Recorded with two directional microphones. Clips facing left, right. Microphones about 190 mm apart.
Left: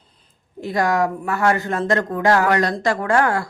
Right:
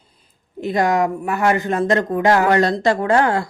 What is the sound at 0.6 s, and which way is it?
Speech, 20° right (ahead or behind).